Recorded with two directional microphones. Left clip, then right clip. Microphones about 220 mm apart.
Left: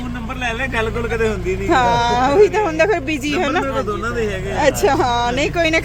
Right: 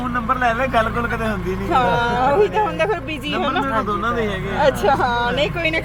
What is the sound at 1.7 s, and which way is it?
Speech, 60° left (ahead or behind).